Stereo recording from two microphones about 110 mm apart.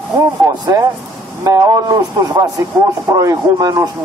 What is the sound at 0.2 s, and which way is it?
A man's voice, 35° right (ahead or behind).